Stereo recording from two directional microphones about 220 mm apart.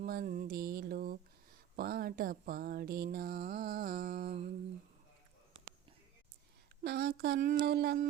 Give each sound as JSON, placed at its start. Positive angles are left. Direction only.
{"t": 0.0, "sound": "mantra", "side_deg": -40}
{"t": 1.7, "sound": "a sound", "side_deg": -45}
{"t": 6.8, "sound": "speech", "side_deg": -45}